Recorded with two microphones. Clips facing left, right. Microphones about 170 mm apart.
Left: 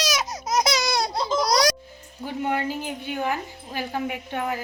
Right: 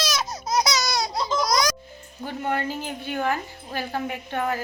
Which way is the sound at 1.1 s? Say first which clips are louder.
Left 1 dB; 30° left (ahead or behind).